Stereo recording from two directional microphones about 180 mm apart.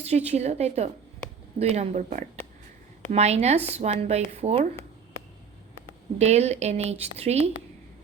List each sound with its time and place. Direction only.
0.0 s speech: 35° right (ahead or behind)
6.1 s speech: 35° right (ahead or behind)